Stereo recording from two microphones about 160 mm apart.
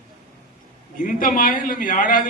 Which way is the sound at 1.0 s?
60° left (ahead or behind).